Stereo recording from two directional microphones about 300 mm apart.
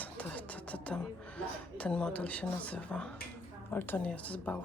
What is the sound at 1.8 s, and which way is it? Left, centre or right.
Speech, centre.